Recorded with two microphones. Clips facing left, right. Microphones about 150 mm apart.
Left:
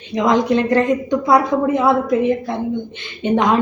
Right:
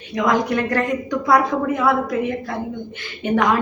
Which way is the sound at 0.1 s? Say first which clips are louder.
Left 4 dB; 25° left (ahead or behind).